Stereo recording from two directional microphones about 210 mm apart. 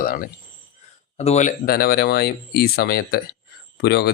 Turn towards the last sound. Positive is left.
turn(degrees=50)  # may be behind; listen again after turning